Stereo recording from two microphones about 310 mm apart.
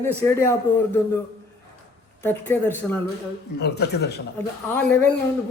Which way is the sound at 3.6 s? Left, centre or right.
Left.